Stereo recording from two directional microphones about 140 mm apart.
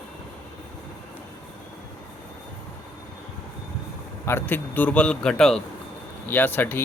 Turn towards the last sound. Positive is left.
turn(degrees=15)  # may be behind; listen again after turning